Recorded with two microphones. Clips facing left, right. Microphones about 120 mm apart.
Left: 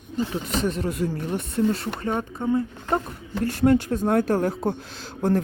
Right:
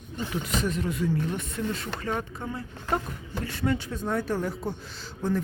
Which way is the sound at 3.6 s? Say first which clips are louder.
Left 9 dB; 45° left (ahead or behind).